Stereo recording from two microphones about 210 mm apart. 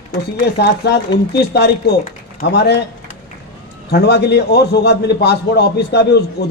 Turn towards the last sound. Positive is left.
turn(degrees=50)  # may be behind; listen again after turning